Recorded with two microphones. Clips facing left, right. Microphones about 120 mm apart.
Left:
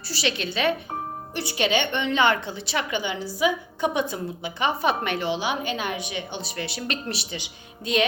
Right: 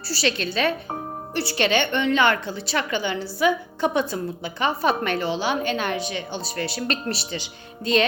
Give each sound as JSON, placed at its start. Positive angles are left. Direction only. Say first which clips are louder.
{"t": 0.1, "sound": "a woman's voice", "louder": "right 3 dB", "side_deg": 15}